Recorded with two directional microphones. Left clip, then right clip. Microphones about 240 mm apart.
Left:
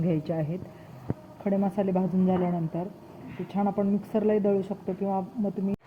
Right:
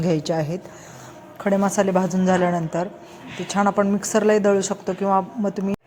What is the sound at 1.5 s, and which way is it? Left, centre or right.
Speech, right.